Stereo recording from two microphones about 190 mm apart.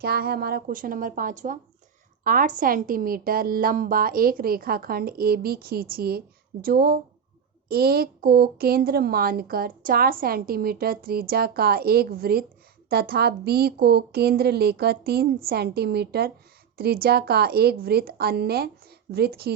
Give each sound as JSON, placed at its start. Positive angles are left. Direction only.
{"t": 0.0, "sound": "a woman's voice", "side_deg": -55}